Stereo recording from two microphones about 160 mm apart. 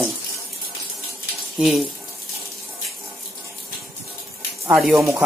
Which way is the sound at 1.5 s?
Centre (ahead or behind).